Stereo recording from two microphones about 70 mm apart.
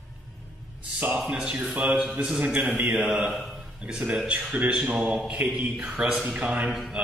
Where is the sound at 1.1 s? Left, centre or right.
Centre.